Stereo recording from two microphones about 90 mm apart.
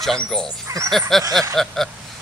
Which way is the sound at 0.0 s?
5° left (ahead or behind).